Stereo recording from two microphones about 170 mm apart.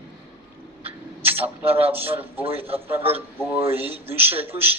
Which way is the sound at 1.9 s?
10° right (ahead or behind).